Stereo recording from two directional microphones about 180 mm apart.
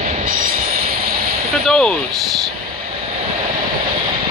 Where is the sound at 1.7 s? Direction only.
5° left (ahead or behind).